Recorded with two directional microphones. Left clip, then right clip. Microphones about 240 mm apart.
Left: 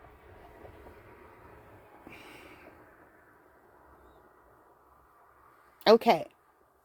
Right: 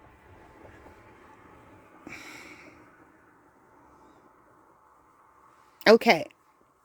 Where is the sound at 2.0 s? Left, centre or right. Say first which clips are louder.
Right 7 dB; right.